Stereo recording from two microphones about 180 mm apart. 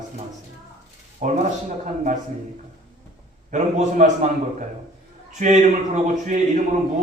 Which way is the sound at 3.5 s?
40° right (ahead or behind).